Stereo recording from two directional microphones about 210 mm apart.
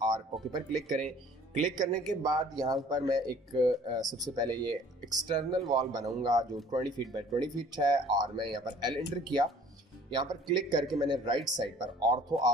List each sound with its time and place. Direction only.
0.0 s speech: 20° right (ahead or behind)
0.7 s speech: centre (ahead or behind)
2.2 s speech: 20° right (ahead or behind)